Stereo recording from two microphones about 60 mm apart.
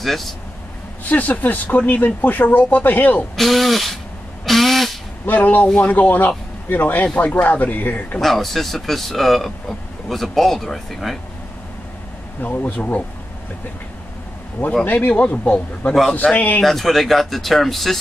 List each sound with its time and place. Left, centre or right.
0.0 s speech: centre
1.0 s speech: left
3.3 s speech: centre
4.5 s a sound: centre
5.2 s speech: left
8.2 s speech: centre
12.4 s speech: left
14.9 s speech: left
16.1 s a man's voice: centre
16.3 s speech: left
16.6 s speech: centre